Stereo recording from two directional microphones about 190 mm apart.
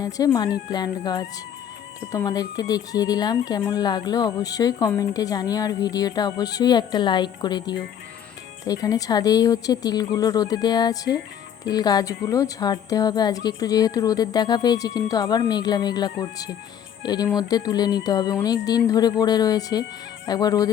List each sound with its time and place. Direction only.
0.0 s speech: 20° left (ahead or behind)